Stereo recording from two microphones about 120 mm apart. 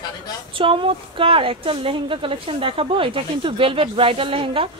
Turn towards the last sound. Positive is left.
turn(degrees=-50)  # may be behind; listen again after turning